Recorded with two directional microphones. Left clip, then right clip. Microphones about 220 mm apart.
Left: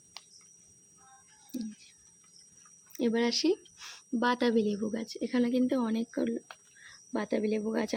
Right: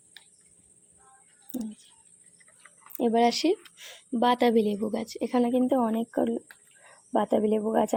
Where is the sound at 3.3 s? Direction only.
35° left (ahead or behind).